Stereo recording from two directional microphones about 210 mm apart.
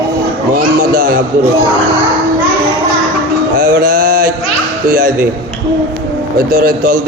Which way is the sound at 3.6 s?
40° right (ahead or behind).